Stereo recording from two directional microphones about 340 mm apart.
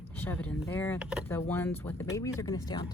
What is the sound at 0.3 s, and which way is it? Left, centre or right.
Speech, centre.